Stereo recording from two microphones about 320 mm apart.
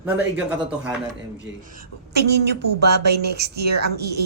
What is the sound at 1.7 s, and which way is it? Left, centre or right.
A woman's voice, right.